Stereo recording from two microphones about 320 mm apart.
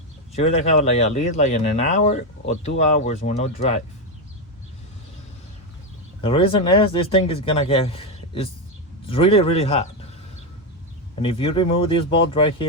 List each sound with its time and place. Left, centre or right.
0.3 s speech: centre
6.2 s speech: centre
11.1 s speech: centre